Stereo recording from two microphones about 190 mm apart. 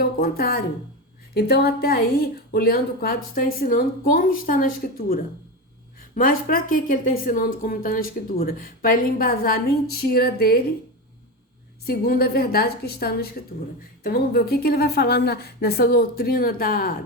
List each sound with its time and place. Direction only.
0.0 s a woman's voice: 50° left (ahead or behind)
11.9 s a woman's voice: 55° left (ahead or behind)